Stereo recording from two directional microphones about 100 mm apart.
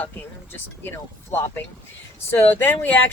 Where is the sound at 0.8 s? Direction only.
25° left (ahead or behind).